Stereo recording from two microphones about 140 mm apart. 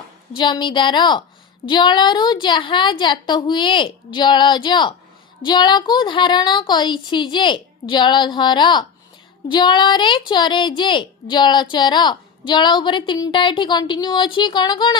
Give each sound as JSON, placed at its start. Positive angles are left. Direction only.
{"t": 0.3, "sound": "a woman's voice", "side_deg": 35}